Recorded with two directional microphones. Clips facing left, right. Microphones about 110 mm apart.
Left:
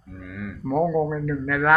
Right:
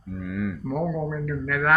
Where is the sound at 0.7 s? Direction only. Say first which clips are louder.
Left 8 dB; 30° left (ahead or behind).